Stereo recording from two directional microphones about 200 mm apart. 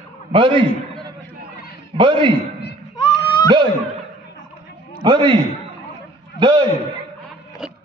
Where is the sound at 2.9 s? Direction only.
15° left (ahead or behind).